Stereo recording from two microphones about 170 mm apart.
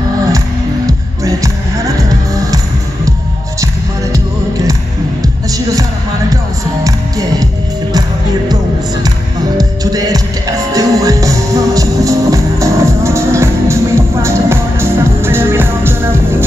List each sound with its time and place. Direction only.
0.8 s music: 20° right (ahead or behind)
6.3 s music: 20° right (ahead or behind)
9.6 s music: 20° right (ahead or behind)